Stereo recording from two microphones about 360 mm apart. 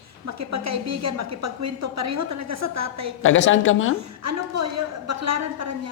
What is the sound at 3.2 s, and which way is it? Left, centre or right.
Speech, left.